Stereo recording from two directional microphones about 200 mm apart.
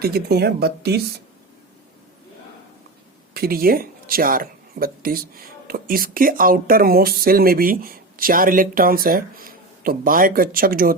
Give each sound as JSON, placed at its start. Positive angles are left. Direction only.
{"t": 0.0, "sound": "speech", "side_deg": -50}
{"t": 3.3, "sound": "speech", "side_deg": -50}